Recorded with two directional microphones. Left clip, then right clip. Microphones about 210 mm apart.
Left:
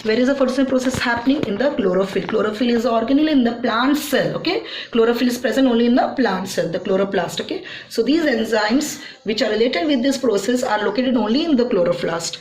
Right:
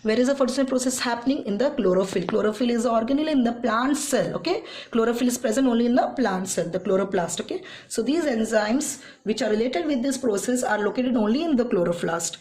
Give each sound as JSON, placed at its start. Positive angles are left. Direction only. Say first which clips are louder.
{"t": 0.1, "sound": "speech", "louder": "left 4 dB", "side_deg": -55}